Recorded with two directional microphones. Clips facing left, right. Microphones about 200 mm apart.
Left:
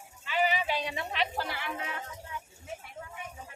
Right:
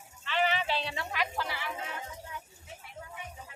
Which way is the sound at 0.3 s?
10° left (ahead or behind).